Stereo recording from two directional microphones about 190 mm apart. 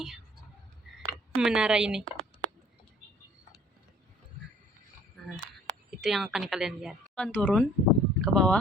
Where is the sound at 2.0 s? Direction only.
90° right.